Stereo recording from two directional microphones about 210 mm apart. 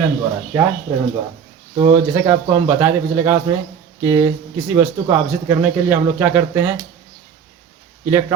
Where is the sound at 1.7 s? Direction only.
20° right (ahead or behind).